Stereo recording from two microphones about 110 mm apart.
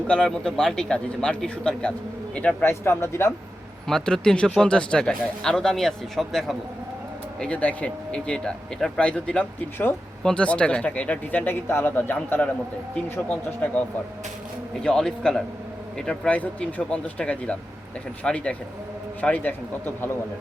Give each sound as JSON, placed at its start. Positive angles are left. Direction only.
{"t": 0.1, "sound": "speech", "side_deg": 5}
{"t": 3.8, "sound": "speech", "side_deg": 5}